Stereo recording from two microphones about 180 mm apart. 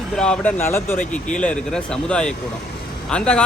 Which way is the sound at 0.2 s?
5° left (ahead or behind).